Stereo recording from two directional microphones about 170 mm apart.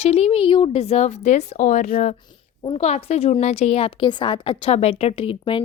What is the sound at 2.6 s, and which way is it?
A woman's voice, 35° left (ahead or behind).